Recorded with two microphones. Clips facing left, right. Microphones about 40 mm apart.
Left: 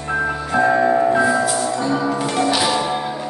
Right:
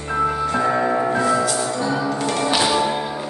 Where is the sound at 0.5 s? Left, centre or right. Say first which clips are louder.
Left 8 dB; centre.